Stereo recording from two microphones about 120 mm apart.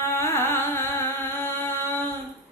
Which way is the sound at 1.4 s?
20° left (ahead or behind).